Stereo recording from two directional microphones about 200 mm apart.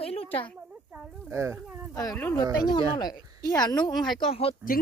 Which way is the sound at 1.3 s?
15° right (ahead or behind).